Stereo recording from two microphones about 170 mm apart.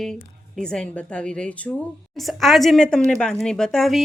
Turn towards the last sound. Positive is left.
turn(degrees=0)  # may be behind; listen again after turning